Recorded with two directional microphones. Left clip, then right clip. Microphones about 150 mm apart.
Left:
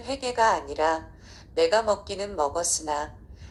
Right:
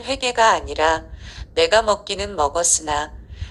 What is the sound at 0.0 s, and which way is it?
A woman's voice, 15° right (ahead or behind).